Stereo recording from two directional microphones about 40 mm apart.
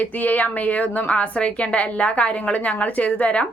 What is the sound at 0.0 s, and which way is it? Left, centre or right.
A woman's voice, left.